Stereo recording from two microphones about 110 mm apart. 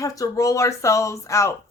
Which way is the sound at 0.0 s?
30° left (ahead or behind).